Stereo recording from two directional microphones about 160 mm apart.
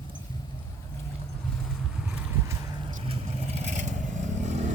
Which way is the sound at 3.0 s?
45° right (ahead or behind).